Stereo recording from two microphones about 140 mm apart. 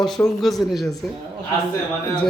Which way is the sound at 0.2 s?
15° left (ahead or behind).